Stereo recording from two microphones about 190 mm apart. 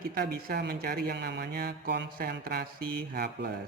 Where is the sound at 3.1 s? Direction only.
55° right (ahead or behind).